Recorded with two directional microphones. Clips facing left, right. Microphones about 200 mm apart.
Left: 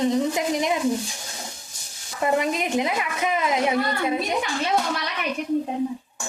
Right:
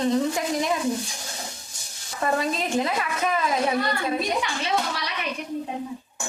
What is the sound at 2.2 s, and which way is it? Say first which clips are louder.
A woman's voice: left 2 dB; 15° left (ahead or behind).